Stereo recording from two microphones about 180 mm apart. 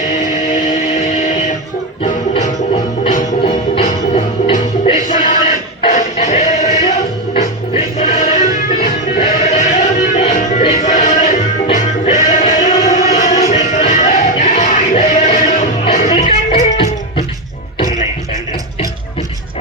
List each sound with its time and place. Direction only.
0.5 s music: 40° left (ahead or behind)
3.4 s music: 35° left (ahead or behind)
5.0 s a sound: 45° left (ahead or behind)
7.3 s music: 45° left (ahead or behind)
10.8 s music: 45° left (ahead or behind); by 17.2 s 30° left (ahead or behind)